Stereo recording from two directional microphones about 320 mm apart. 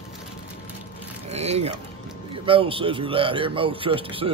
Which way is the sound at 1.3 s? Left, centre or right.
Centre.